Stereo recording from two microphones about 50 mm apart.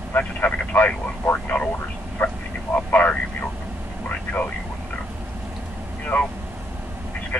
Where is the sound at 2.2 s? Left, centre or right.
Left.